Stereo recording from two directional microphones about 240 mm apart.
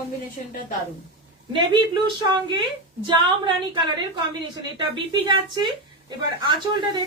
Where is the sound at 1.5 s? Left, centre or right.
Centre.